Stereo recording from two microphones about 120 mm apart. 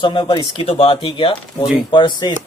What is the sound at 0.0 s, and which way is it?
Speech, 45° left (ahead or behind).